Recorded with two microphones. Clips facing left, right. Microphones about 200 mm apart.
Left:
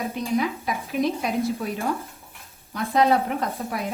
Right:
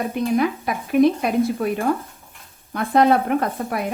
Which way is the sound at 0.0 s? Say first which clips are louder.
Right 5 dB; 50° right (ahead or behind).